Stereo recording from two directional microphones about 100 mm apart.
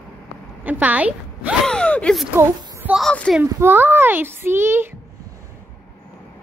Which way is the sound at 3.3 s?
5° left (ahead or behind).